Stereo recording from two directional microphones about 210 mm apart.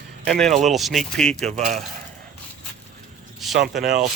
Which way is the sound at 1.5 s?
30° right (ahead or behind).